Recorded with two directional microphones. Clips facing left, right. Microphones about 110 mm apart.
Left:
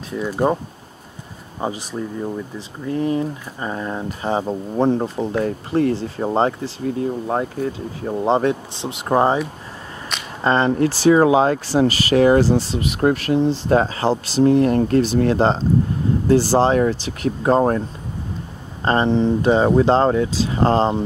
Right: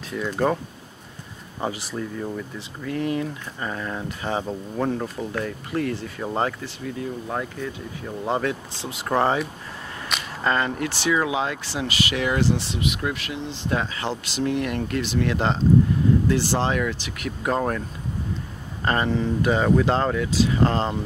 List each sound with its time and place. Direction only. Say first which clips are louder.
0.3 s speech: left 3 dB; 20° left (ahead or behind)
1.6 s speech: left 3 dB; 20° left (ahead or behind)
10.4 s speech: left 7 dB; 30° left (ahead or behind)
18.9 s speech: left 6 dB; 30° left (ahead or behind)